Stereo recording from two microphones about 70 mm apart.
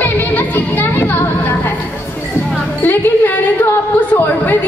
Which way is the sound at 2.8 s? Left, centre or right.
Left.